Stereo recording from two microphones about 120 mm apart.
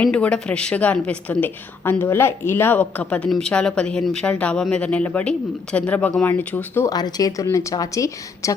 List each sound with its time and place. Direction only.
0.0 s a woman's voice: 10° left (ahead or behind)
6.8 s speech: 35° left (ahead or behind)